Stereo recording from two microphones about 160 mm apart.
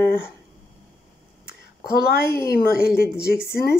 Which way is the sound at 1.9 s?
75° left (ahead or behind).